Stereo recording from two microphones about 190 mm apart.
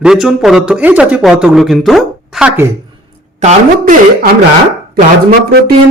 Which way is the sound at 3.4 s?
35° right (ahead or behind).